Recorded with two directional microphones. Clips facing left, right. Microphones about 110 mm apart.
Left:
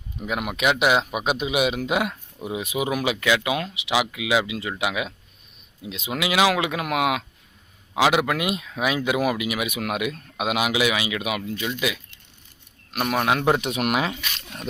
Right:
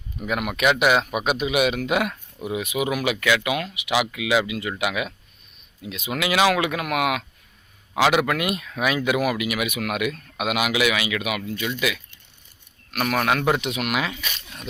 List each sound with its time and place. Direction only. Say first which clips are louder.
0.2 s a man's voice: right 2 dB; 20° left (ahead or behind)
13.0 s a man's voice: even; 15° left (ahead or behind)
13.6 s speech: left 2 dB; 40° left (ahead or behind)